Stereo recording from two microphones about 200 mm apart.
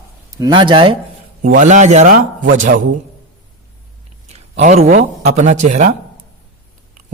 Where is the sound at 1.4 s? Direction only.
40° right (ahead or behind).